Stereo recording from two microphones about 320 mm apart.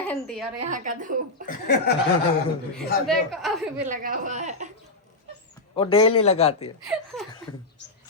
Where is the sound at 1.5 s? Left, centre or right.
Left.